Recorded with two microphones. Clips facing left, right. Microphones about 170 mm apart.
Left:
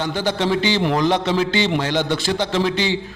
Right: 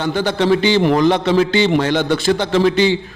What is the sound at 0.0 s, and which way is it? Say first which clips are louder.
A man's voice: right 4 dB; 55° right (ahead or behind).